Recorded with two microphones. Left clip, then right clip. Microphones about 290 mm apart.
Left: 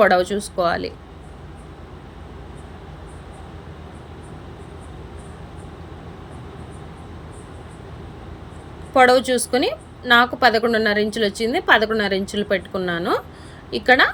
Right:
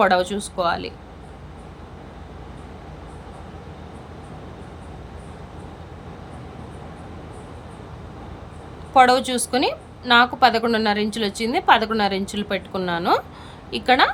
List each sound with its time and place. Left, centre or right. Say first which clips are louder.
0.0 s a woman's voice: left 2 dB; centre
8.9 s a woman's voice: left 1 dB; centre